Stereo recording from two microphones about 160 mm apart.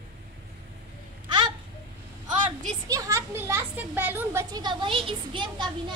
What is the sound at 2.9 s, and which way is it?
Children playing, 20° right (ahead or behind).